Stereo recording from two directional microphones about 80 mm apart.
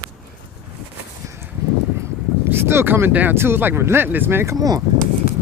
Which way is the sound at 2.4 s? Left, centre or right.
Right.